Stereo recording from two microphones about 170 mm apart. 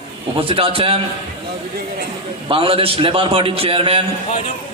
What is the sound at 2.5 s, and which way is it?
A man's voice, 35° right (ahead or behind).